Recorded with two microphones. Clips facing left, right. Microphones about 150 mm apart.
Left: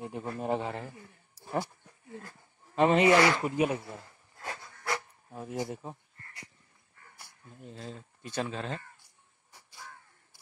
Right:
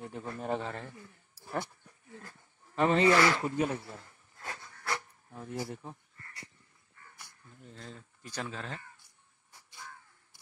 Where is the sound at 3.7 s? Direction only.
20° left (ahead or behind).